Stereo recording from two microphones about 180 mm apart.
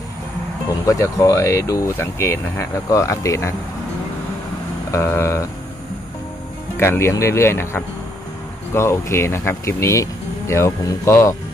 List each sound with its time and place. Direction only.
0.8 s speech: 15° left (ahead or behind)
4.9 s speech: 15° left (ahead or behind)
6.8 s speech: 15° left (ahead or behind)